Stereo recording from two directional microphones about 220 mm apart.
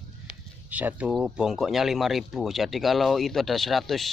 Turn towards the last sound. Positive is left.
turn(degrees=0)  # may be behind; listen again after turning